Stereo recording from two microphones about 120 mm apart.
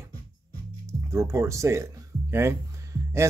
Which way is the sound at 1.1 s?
25° right (ahead or behind).